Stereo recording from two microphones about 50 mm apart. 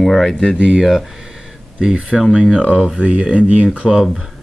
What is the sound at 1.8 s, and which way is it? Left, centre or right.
Speech, centre.